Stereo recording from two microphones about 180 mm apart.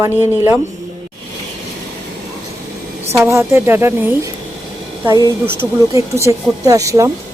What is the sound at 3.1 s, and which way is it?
Speech, 15° right (ahead or behind).